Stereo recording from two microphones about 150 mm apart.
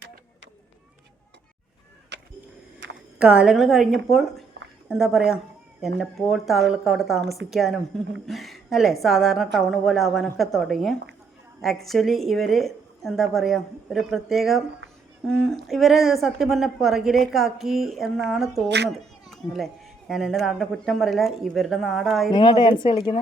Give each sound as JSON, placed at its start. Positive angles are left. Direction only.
{"t": 2.9, "sound": "a child's voice", "side_deg": -5}
{"t": 22.3, "sound": "speech", "side_deg": 30}